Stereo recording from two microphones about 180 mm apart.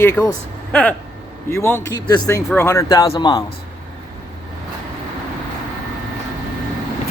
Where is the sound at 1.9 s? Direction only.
20° left (ahead or behind).